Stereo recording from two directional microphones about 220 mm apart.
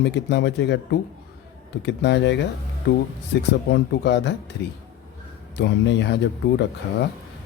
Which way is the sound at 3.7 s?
50° left (ahead or behind).